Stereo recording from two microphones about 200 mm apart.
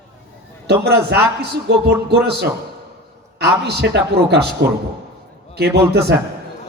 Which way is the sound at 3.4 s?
55° right (ahead or behind).